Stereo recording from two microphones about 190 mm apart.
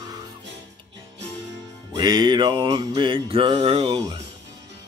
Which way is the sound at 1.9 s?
20° right (ahead or behind).